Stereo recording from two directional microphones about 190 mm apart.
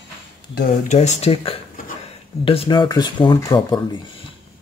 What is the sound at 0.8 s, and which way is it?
Speech, 40° left (ahead or behind).